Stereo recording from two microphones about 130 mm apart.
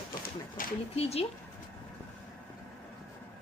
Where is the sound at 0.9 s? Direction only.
50° left (ahead or behind).